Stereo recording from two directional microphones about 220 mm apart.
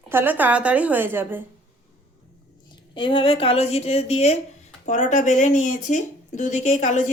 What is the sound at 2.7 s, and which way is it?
A woman's voice, 20° left (ahead or behind).